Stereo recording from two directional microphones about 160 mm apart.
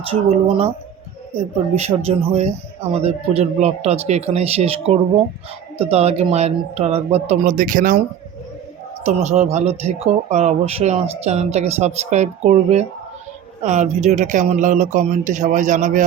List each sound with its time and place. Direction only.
0.0 s a man's voice: 35° right (ahead or behind)
2.0 s a man's voice: 40° right (ahead or behind)
7.5 s speech: 55° right (ahead or behind)
9.0 s speech: 45° right (ahead or behind)